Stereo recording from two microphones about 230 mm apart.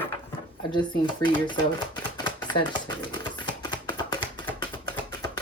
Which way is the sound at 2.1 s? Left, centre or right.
Centre.